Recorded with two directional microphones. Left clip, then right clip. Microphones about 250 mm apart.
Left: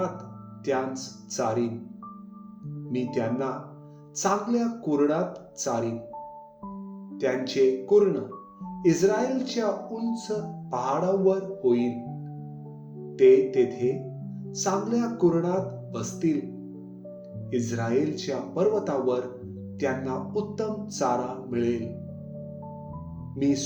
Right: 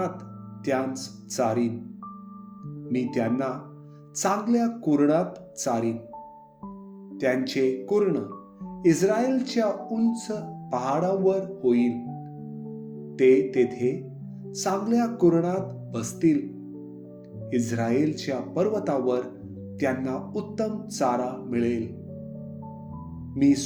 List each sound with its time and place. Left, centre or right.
0.6 s speech: right
2.9 s speech: right
7.2 s speech: right
13.1 s speech: right
17.5 s speech: right
23.3 s speech: right